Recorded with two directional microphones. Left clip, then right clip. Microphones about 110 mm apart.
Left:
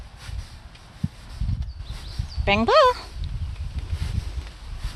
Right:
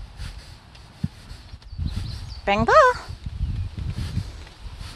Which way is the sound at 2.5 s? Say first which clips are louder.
Right 1 dB; 20° left (ahead or behind).